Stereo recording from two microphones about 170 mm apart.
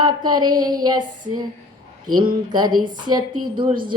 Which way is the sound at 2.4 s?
25° right (ahead or behind).